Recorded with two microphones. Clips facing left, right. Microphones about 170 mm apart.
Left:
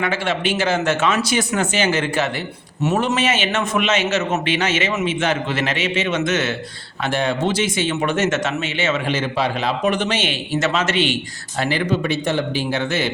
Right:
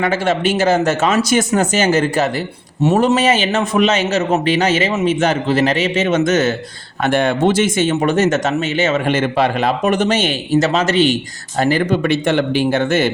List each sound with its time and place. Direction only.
0.0 s a man's voice: 40° right (ahead or behind)
7.0 s speech: 55° right (ahead or behind)
12.0 s speech: 65° right (ahead or behind); by 13.1 s 50° right (ahead or behind)